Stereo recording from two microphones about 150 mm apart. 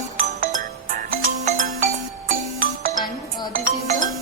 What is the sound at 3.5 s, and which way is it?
Music, 60° right (ahead or behind).